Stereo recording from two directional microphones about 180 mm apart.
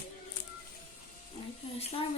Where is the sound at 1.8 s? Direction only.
35° left (ahead or behind).